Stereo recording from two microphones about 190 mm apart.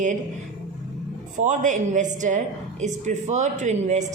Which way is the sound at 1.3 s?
40° right (ahead or behind).